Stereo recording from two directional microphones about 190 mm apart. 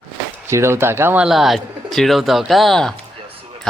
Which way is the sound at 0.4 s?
15° right (ahead or behind).